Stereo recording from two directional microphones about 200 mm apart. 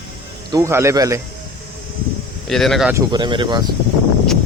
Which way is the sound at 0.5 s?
15° right (ahead or behind).